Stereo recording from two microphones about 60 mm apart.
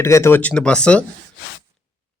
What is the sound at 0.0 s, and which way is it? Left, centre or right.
Speech, left.